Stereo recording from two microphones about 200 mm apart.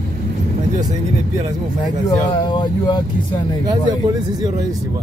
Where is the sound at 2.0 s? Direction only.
20° left (ahead or behind).